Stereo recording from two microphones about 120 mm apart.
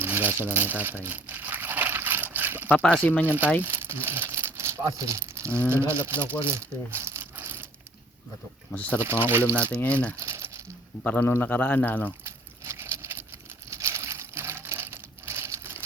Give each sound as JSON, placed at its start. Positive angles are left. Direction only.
{"t": 0.0, "sound": "speech", "side_deg": -20}
{"t": 1.0, "sound": "crumpling", "side_deg": -15}
{"t": 2.6, "sound": "speech", "side_deg": 15}
{"t": 3.2, "sound": "speech", "side_deg": -15}
{"t": 3.6, "sound": "crumpling", "side_deg": -20}
{"t": 5.7, "sound": "speech", "side_deg": -20}
{"t": 6.4, "sound": "crumpling", "side_deg": -20}
{"t": 8.7, "sound": "speech", "side_deg": 10}
{"t": 9.0, "sound": "speech", "side_deg": -20}
{"t": 9.8, "sound": "speech", "side_deg": 10}
{"t": 10.2, "sound": "crumpling", "side_deg": -25}
{"t": 11.0, "sound": "speech", "side_deg": 15}
{"t": 12.2, "sound": "a sound", "side_deg": -20}
{"t": 13.7, "sound": "crumpling", "side_deg": -25}